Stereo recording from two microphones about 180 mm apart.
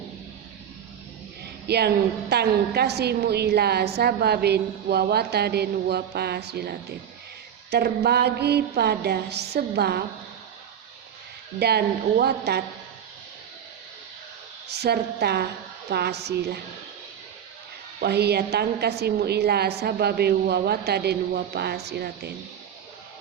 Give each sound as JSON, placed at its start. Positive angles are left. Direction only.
{"t": 1.6, "sound": "a woman's voice", "side_deg": -65}
{"t": 11.6, "sound": "a woman's voice", "side_deg": -65}
{"t": 14.7, "sound": "a woman's voice", "side_deg": -65}
{"t": 18.0, "sound": "a woman's voice", "side_deg": -65}